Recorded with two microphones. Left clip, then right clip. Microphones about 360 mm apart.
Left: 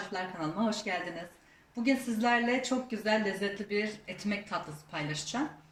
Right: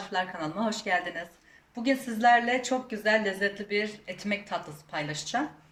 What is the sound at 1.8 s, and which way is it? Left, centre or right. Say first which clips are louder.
Speech: right 6 dB; right.